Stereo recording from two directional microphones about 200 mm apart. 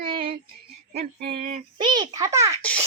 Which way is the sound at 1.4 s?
45° right (ahead or behind).